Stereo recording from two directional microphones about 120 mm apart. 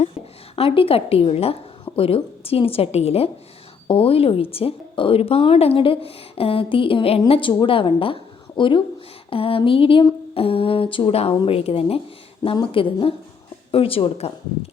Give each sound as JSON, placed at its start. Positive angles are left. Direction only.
{"t": 0.5, "sound": "a woman's voice", "side_deg": 50}